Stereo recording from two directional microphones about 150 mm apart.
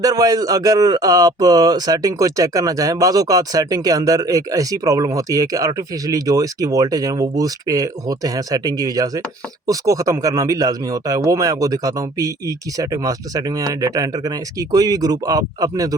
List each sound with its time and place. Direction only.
0.0 s speech: 25° right (ahead or behind)